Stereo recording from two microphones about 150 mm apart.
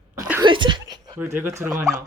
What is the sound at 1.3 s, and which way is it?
Speech, 15° right (ahead or behind).